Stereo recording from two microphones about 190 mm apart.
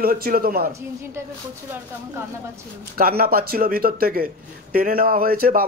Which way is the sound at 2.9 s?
50° right (ahead or behind).